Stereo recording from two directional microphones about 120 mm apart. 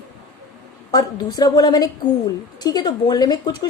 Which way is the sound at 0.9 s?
30° left (ahead or behind).